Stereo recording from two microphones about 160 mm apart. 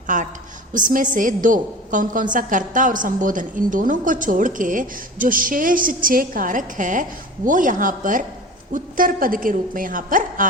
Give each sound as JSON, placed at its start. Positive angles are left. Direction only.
{"t": 0.1, "sound": "a woman's voice", "side_deg": -55}